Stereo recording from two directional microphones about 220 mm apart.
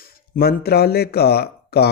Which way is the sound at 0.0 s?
40° left (ahead or behind).